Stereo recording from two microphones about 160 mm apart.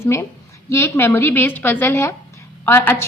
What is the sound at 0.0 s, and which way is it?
A woman's voice, 15° left (ahead or behind).